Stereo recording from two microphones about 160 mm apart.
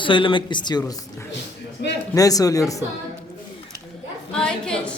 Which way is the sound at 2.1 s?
20° left (ahead or behind).